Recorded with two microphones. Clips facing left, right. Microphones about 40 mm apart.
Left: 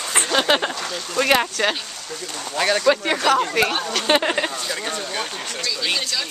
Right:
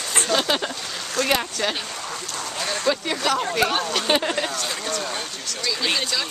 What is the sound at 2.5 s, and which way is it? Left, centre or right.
Speech, left.